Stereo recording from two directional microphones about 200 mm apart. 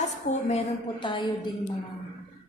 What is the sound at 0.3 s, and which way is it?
A woman's voice, 30° left (ahead or behind).